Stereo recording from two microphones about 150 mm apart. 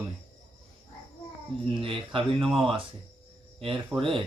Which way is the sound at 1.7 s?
35° right (ahead or behind).